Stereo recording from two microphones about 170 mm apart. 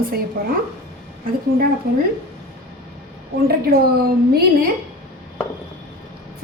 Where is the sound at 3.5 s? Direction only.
65° right (ahead or behind).